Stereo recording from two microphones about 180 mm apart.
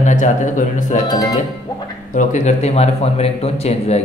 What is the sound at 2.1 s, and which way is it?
Speech, 45° left (ahead or behind).